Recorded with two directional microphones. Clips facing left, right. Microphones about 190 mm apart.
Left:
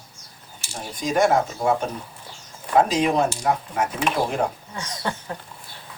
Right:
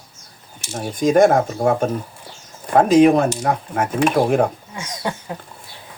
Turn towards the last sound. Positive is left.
turn(degrees=-15)  # may be behind; listen again after turning